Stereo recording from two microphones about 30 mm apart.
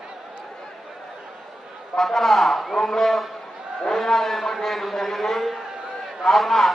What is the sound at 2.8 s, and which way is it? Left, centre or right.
A man's voice, centre.